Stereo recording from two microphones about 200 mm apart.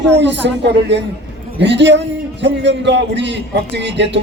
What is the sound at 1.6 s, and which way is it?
A man's voice, 60° right (ahead or behind).